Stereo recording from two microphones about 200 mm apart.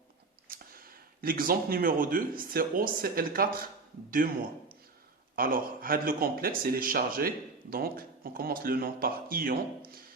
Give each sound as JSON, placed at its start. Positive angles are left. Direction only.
{"t": 0.4, "sound": "speech", "side_deg": -45}
{"t": 5.4, "sound": "speech", "side_deg": -45}